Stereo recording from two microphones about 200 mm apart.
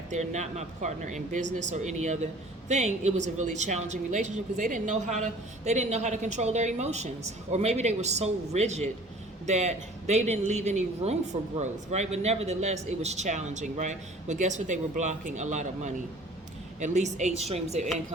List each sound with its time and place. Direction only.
0.1 s speech: 35° right (ahead or behind)